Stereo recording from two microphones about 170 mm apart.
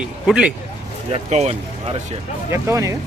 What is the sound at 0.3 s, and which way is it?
Speech, 5° right (ahead or behind).